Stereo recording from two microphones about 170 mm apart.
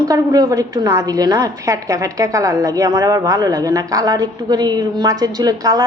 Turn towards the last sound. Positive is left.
turn(degrees=-20)  # may be behind; listen again after turning